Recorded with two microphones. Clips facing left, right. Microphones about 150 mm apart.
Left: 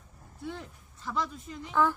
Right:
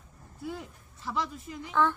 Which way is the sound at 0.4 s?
5° right (ahead or behind).